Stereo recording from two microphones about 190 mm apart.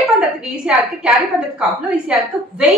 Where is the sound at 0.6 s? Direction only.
5° right (ahead or behind).